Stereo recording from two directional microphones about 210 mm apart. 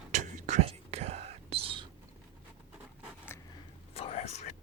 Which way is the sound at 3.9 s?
30° left (ahead or behind).